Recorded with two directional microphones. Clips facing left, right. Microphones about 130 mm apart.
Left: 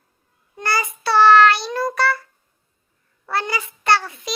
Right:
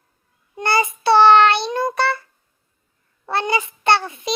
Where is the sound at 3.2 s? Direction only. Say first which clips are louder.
Right 3 dB; 25° right (ahead or behind).